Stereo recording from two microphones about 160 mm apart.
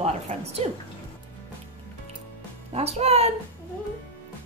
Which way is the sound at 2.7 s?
40° right (ahead or behind).